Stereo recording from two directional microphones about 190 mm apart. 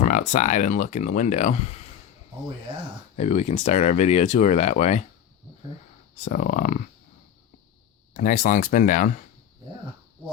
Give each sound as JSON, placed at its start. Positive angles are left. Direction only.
{"t": 0.0, "sound": "speech", "side_deg": 40}
{"t": 2.7, "sound": "speech", "side_deg": -25}
{"t": 3.2, "sound": "speech", "side_deg": 35}
{"t": 6.2, "sound": "speech", "side_deg": 45}
{"t": 8.1, "sound": "speech", "side_deg": 40}